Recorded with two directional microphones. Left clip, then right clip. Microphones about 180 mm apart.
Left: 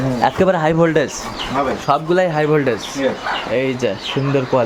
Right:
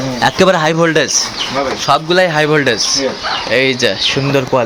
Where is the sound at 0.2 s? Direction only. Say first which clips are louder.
Right 4 dB; 15° right (ahead or behind).